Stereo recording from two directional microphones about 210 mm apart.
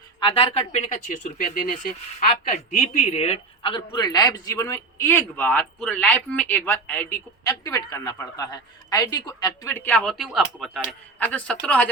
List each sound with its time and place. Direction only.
0.2 s a man's voice: 25° left (ahead or behind); by 11.9 s 5° left (ahead or behind)